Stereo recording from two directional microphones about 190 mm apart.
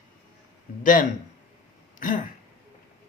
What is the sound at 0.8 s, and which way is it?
Speech, 45° left (ahead or behind).